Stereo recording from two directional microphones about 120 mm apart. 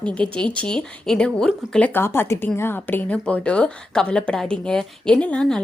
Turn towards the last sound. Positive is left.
turn(degrees=10)  # may be behind; listen again after turning